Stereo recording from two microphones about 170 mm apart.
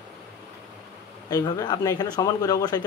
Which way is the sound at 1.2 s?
20° left (ahead or behind).